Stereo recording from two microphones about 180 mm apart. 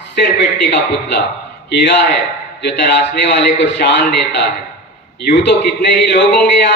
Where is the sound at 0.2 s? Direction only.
75° left (ahead or behind).